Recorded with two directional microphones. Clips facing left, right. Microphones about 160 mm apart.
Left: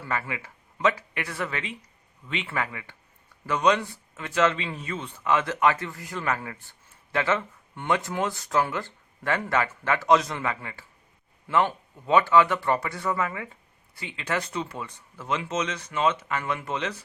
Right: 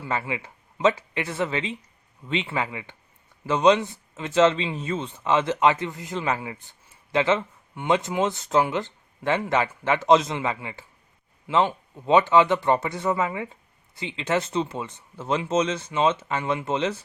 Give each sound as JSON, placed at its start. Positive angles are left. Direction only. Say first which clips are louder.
{"t": 0.0, "sound": "speech", "louder": "right 3 dB", "side_deg": -25}